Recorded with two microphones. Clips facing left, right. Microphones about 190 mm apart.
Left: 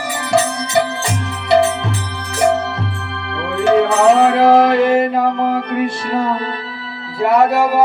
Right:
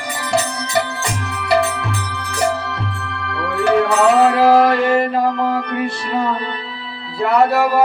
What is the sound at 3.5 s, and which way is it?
Music, 20° left (ahead or behind).